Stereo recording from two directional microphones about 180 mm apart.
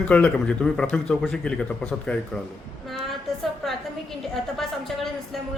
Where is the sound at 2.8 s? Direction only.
Centre (ahead or behind).